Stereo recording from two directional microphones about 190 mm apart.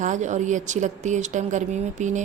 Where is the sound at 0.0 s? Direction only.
40° right (ahead or behind).